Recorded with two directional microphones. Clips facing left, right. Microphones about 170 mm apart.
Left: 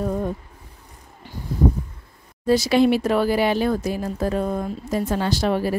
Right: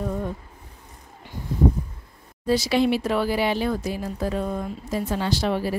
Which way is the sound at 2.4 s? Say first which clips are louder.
Left 4 dB; 50° left (ahead or behind).